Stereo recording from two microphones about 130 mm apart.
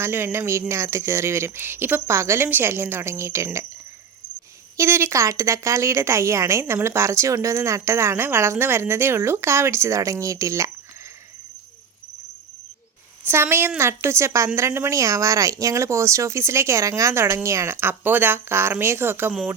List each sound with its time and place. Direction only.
0.0 s a woman's voice: 20° right (ahead or behind)
4.8 s a woman's voice: 20° right (ahead or behind)
13.2 s a woman's voice: 20° right (ahead or behind)